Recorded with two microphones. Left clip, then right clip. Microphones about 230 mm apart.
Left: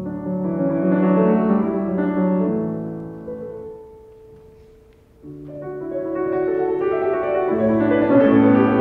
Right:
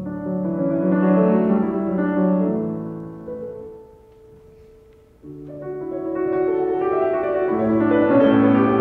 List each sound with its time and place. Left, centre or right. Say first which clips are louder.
0.0 s music: even; left
5.6 s music: left 1 dB; left